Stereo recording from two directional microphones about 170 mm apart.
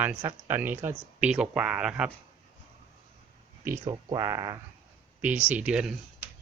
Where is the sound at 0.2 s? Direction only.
15° right (ahead or behind).